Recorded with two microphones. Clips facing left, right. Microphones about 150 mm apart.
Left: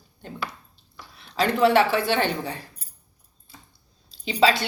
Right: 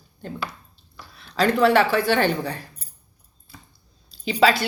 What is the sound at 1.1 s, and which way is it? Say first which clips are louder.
A woman's voice: right 3 dB; 20° left (ahead or behind).